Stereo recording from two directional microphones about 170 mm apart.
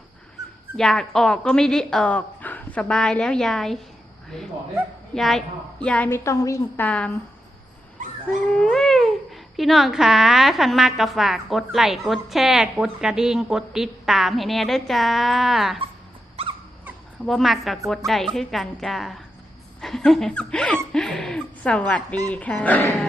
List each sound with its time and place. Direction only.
0.4 s dog: 20° right (ahead or behind)
0.8 s a woman's voice: 5° left (ahead or behind)
8.6 s speech: centre (ahead or behind)
16.4 s squeak: 35° right (ahead or behind)
17.2 s a woman's voice: centre (ahead or behind)